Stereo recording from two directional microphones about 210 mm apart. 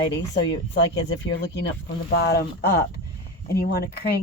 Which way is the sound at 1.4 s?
55° left (ahead or behind).